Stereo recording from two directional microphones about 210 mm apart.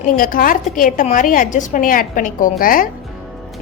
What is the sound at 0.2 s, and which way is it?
A woman's voice, 40° left (ahead or behind).